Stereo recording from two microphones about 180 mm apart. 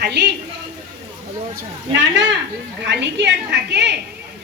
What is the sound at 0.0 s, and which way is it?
Speech, 65° right (ahead or behind).